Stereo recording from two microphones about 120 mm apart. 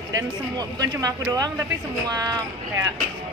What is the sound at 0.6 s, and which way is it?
Speech, 30° right (ahead or behind).